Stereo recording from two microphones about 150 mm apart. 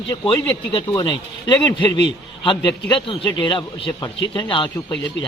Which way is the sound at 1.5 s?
30° left (ahead or behind).